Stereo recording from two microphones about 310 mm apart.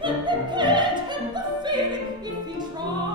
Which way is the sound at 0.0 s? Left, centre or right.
Centre.